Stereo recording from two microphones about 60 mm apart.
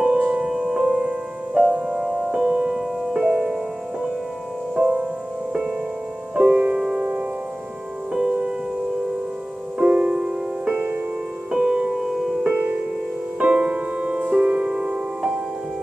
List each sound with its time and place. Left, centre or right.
0.0 s music: right
0.5 s music: centre
3.1 s music: centre
4.7 s music: right
9.8 s music: right; by 12.4 s centre
12.4 s music: right